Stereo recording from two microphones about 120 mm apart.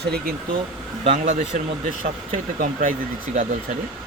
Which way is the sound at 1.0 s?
90° right.